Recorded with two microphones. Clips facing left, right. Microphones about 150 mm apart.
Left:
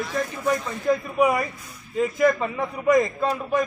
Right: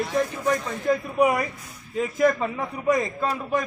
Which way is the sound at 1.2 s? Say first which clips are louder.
Right 1 dB; centre (ahead or behind).